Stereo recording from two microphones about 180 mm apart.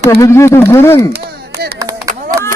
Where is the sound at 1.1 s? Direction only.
65° right (ahead or behind).